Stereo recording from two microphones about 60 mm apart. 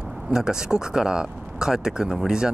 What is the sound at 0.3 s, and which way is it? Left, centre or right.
Speech, centre.